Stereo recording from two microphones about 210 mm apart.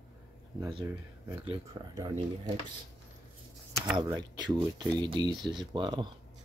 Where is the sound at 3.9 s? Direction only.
20° right (ahead or behind).